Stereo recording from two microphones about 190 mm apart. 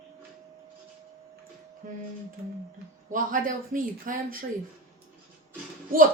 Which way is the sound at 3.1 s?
45° right (ahead or behind).